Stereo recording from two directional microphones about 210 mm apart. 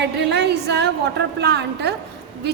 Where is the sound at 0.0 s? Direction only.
55° right (ahead or behind).